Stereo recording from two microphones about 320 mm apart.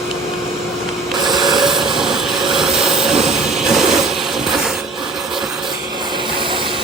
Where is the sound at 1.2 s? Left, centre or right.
Centre.